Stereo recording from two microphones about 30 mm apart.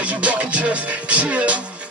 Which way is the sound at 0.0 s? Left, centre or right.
Right.